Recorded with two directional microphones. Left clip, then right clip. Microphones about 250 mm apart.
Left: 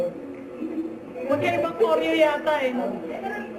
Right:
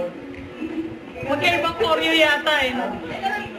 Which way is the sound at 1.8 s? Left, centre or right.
Centre.